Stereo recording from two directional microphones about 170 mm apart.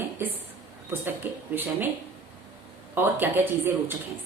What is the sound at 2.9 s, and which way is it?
A woman's voice, 10° right (ahead or behind).